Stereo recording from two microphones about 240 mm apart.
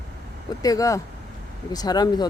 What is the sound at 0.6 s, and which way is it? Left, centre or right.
Speech, centre.